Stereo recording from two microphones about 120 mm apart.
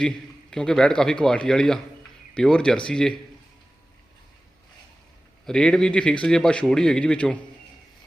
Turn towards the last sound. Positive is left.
turn(degrees=10)  # may be behind; listen again after turning